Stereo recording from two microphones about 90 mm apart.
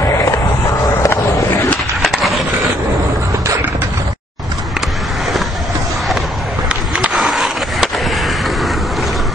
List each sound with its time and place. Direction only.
1.0 s skateboard: 35° left (ahead or behind)
2.0 s skateboard: centre (ahead or behind)
7.2 s skateboard: centre (ahead or behind)